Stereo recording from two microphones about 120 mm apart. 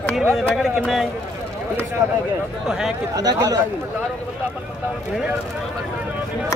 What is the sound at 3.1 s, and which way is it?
Speech, 30° right (ahead or behind).